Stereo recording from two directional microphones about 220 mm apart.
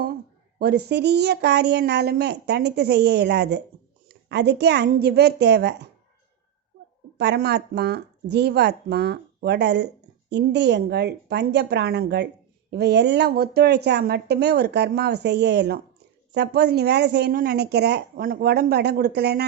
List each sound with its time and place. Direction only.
0.6 s speech: 45° right (ahead or behind)
7.2 s speech: 50° right (ahead or behind)